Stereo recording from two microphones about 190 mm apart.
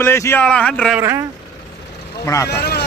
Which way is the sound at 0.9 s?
15° right (ahead or behind).